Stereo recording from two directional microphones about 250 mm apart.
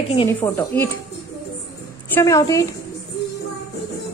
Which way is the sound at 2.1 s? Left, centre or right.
Centre.